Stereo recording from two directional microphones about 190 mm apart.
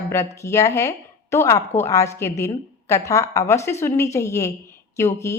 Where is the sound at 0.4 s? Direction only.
15° left (ahead or behind).